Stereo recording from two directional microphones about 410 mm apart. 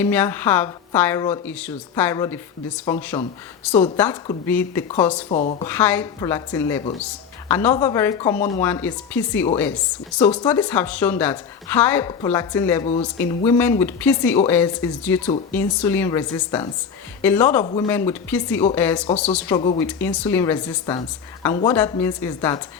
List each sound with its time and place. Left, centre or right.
0.0 s speech: centre
5.3 s speech: centre
5.6 s speech: centre